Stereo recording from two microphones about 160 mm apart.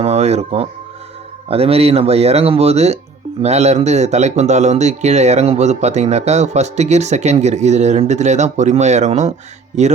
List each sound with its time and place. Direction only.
0.0 s music: 40° right (ahead or behind)
1.5 s speech: 35° right (ahead or behind)